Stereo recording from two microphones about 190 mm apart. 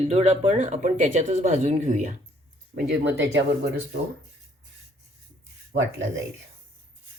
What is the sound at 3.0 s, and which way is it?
Speech, 70° right (ahead or behind).